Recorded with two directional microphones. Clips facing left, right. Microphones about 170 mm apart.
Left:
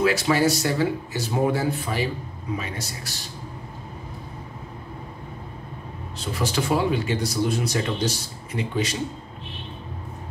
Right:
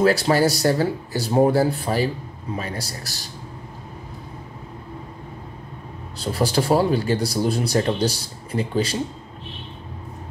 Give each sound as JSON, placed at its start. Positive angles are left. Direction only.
{"t": 0.0, "sound": "speech", "side_deg": -35}
{"t": 6.1, "sound": "speech", "side_deg": -35}